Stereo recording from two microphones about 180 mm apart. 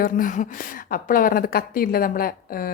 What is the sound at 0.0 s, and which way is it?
A woman's voice, 45° left (ahead or behind).